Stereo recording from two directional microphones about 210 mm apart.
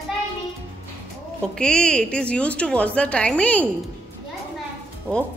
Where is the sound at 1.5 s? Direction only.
5° left (ahead or behind).